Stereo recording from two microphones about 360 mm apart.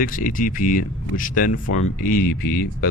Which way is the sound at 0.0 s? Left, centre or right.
Left.